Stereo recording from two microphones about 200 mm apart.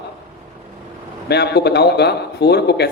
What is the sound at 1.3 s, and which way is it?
A man's voice, 55° left (ahead or behind).